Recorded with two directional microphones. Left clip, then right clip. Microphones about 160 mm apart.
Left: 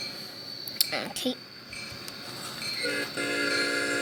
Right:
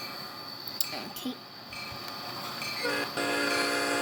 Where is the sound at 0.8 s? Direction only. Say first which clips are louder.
Left 8 dB; 5° left (ahead or behind).